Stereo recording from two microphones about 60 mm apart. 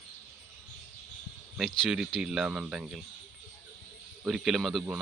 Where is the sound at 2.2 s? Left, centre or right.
Centre.